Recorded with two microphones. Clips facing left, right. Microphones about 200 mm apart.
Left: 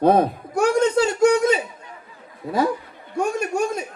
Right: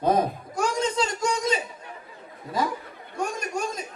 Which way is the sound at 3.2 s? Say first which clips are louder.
Left 7 dB; 60° left (ahead or behind).